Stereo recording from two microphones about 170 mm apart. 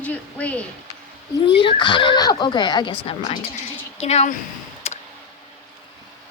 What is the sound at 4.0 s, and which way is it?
Speech, 40° left (ahead or behind).